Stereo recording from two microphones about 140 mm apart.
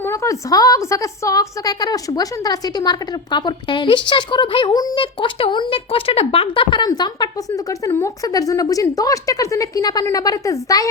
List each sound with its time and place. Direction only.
0.0 s a woman's voice: 20° left (ahead or behind)